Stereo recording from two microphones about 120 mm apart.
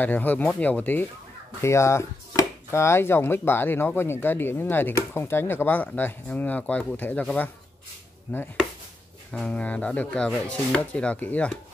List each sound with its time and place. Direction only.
0.0 s speech: 15° left (ahead or behind)
8.3 s speech: 20° left (ahead or behind)